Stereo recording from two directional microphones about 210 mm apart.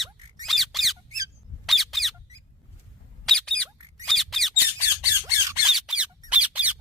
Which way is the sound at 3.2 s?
5° left (ahead or behind).